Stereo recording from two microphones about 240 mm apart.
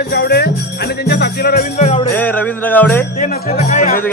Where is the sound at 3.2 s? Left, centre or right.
Left.